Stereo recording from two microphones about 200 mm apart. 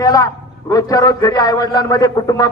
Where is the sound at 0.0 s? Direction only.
15° left (ahead or behind).